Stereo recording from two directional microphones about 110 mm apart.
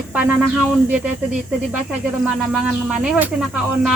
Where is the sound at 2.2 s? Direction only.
10° right (ahead or behind).